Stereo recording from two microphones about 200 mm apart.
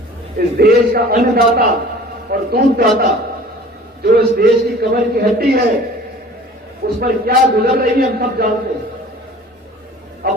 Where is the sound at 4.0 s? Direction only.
50° right (ahead or behind).